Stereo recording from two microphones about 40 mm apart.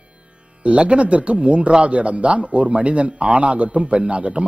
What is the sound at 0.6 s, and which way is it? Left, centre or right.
A man's voice, right.